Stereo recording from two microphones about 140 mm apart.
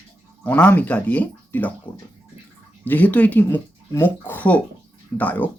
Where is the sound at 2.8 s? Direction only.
10° left (ahead or behind).